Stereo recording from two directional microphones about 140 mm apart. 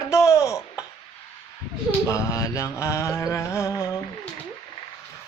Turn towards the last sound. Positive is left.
turn(degrees=20)  # may be behind; listen again after turning